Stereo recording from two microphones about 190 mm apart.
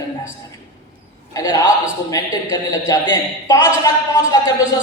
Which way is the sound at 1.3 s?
20° left (ahead or behind).